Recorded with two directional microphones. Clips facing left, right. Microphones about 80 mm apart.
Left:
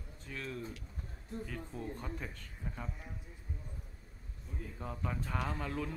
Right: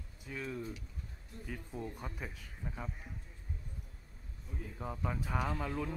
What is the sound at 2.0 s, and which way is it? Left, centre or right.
Speech, centre.